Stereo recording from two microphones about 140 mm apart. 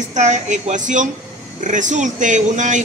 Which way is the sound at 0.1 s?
55° right (ahead or behind).